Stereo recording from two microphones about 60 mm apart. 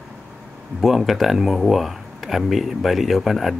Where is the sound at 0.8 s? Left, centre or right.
Centre.